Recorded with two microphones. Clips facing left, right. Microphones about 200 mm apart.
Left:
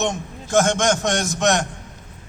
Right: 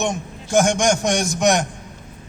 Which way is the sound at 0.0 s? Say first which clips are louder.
Even; 15° right (ahead or behind).